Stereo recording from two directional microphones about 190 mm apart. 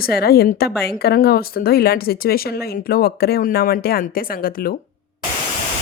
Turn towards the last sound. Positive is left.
turn(degrees=50)  # may be behind; listen again after turning